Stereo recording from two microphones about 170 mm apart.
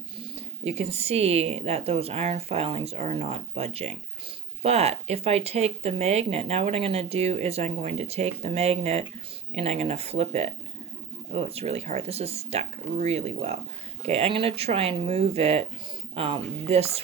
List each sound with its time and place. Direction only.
0.2 s speech: 40° right (ahead or behind)